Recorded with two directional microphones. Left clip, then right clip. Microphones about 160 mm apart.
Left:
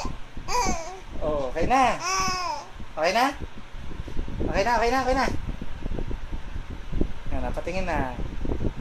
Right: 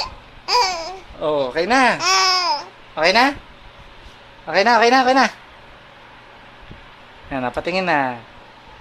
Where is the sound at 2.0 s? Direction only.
25° right (ahead or behind).